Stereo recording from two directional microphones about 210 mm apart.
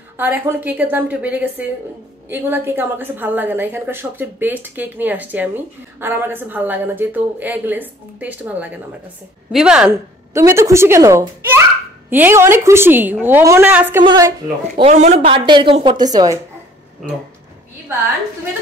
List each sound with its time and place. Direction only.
0.2 s a woman's voice: 10° right (ahead or behind)
14.0 s a woman's voice: 20° right (ahead or behind)
14.8 s a woman's voice: 30° right (ahead or behind)